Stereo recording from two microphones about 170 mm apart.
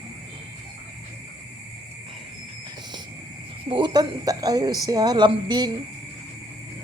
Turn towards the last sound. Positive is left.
turn(degrees=-25)  # may be behind; listen again after turning